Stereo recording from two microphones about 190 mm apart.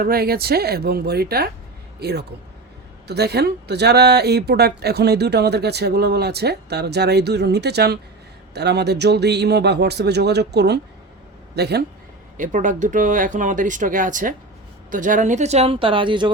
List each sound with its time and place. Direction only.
0.0 s a man's voice: 50° right (ahead or behind)
12.4 s speech: 40° right (ahead or behind); by 16.3 s 25° right (ahead or behind)